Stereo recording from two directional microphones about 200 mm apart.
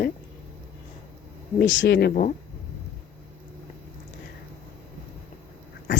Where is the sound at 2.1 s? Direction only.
40° left (ahead or behind).